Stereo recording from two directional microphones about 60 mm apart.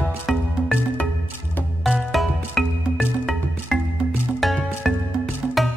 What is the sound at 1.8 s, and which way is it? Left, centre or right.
Music, centre.